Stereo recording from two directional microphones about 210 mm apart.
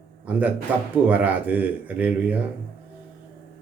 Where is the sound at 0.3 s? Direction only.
5° right (ahead or behind).